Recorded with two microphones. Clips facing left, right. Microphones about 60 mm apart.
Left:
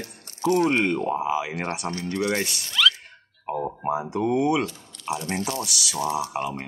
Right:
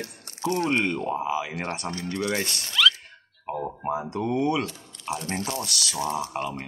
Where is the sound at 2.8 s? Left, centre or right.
Centre.